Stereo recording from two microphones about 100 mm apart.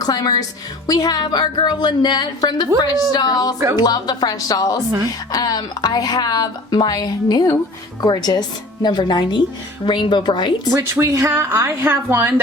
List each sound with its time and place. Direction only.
0.0 s a woman's voice: 40° left (ahead or behind)
11.0 s a woman's voice: 30° right (ahead or behind)